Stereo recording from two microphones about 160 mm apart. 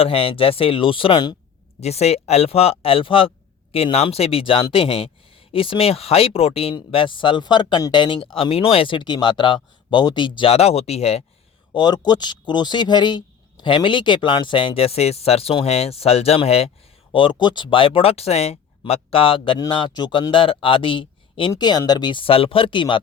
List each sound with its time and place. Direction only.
0.0 s speech: 35° left (ahead or behind)
1.8 s speech: 40° left (ahead or behind)
11.7 s speech: 25° left (ahead or behind)